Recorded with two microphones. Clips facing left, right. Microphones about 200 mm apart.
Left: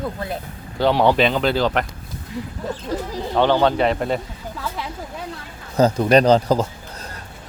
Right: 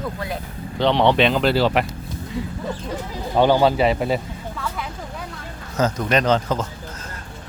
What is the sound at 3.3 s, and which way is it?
Speech, 10° right (ahead or behind).